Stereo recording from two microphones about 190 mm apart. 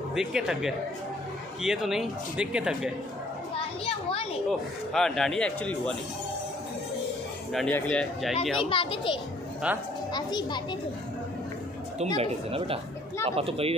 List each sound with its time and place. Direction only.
0.1 s a man's voice: 5° right (ahead or behind)
3.8 s a child's voice: 30° left (ahead or behind)
4.5 s a man's voice: centre (ahead or behind)
7.5 s a man's voice: 5° left (ahead or behind)
8.5 s a child's voice: 30° left (ahead or behind)
9.6 s a woman's voice: 5° right (ahead or behind)
10.1 s a child's voice: 20° left (ahead or behind)
12.2 s speech: 30° right (ahead or behind)